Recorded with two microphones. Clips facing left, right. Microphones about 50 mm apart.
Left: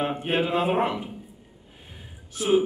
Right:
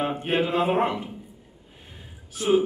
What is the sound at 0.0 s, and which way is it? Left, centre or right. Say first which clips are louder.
A man's voice: right 1 dB; centre.